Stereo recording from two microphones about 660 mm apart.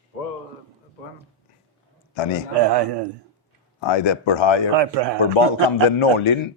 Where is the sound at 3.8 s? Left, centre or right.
Left.